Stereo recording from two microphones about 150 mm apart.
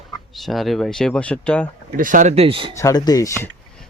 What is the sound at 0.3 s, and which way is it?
Speech, centre (ahead or behind).